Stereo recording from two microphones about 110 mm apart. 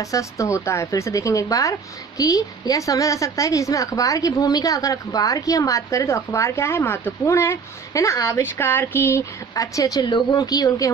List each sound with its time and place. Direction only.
0.0 s speech: 30° left (ahead or behind)